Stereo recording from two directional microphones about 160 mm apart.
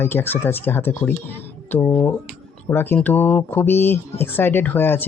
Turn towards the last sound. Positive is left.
turn(degrees=10)  # may be behind; listen again after turning